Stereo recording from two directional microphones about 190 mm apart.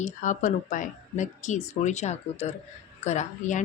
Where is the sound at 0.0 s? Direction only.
40° left (ahead or behind).